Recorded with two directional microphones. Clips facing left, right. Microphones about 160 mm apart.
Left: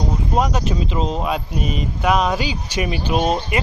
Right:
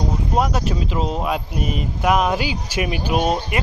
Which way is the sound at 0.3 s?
5° right (ahead or behind).